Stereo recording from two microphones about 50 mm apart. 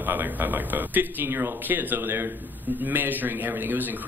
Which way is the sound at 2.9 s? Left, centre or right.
Right.